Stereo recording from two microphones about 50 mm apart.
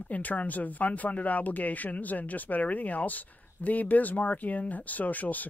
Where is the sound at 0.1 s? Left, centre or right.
Left.